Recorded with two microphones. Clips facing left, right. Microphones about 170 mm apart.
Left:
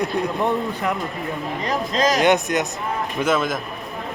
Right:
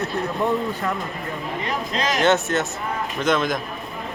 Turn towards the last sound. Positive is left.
turn(degrees=5)  # may be behind; listen again after turning